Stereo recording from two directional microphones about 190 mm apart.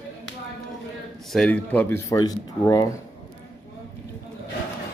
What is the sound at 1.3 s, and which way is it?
Speech, 5° left (ahead or behind).